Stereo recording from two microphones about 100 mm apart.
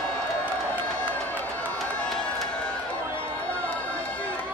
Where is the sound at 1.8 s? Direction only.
Centre (ahead or behind).